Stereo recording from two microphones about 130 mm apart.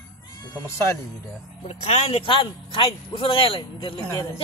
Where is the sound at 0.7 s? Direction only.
20° left (ahead or behind).